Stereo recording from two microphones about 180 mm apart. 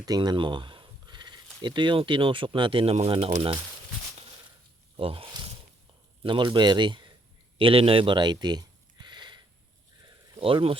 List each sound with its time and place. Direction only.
0.0 s speech: 20° right (ahead or behind)
4.9 s snake: 30° right (ahead or behind)
6.2 s a man's voice: 25° right (ahead or behind)
9.0 s a sound: 25° right (ahead or behind)